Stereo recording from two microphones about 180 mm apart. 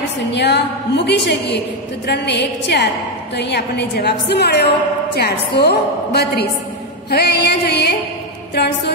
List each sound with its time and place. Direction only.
0.3 s a woman's voice: 70° left (ahead or behind)